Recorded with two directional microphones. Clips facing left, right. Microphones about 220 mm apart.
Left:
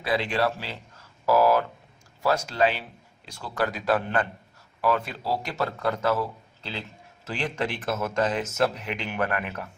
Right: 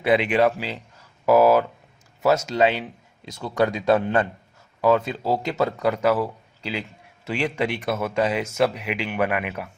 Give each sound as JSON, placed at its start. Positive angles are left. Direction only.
{"t": 0.0, "sound": "speech", "side_deg": -20}
{"t": 7.6, "sound": "speech", "side_deg": -10}